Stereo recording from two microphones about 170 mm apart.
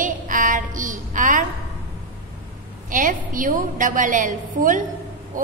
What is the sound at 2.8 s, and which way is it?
A woman's voice, 50° right (ahead or behind).